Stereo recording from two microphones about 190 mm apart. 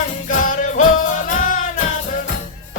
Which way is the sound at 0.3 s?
45° left (ahead or behind).